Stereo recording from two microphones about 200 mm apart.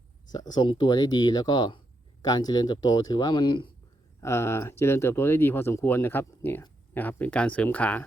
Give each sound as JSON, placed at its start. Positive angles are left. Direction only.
{"t": 0.5, "sound": "speech", "side_deg": 20}
{"t": 4.2, "sound": "speech", "side_deg": 15}